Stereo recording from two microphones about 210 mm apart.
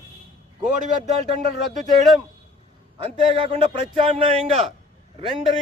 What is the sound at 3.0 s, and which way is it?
A man's voice, 30° right (ahead or behind).